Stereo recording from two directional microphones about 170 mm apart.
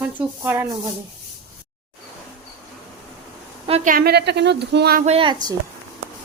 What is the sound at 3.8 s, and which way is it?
Speech, 65° right (ahead or behind).